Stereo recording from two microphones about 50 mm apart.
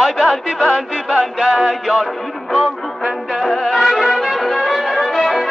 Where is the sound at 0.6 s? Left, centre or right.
Centre.